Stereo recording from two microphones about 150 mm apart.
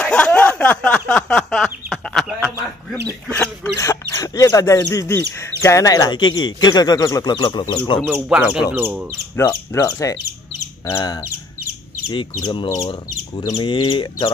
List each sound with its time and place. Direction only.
0.0 s a sound: 10° left (ahead or behind)
3.3 s speech: 15° left (ahead or behind); by 8.0 s 30° left (ahead or behind)
8.1 s speech: 10° right (ahead or behind)
9.4 s speech: 20° left (ahead or behind)